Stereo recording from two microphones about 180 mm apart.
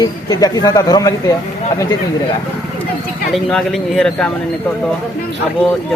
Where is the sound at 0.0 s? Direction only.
20° left (ahead or behind).